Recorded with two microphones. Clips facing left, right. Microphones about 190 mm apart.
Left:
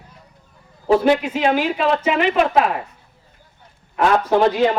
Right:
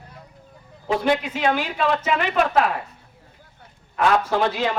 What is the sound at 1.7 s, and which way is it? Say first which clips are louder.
Speech: left 3 dB; 10° left (ahead or behind).